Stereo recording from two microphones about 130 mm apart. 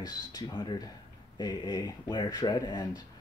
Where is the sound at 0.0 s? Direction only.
30° left (ahead or behind).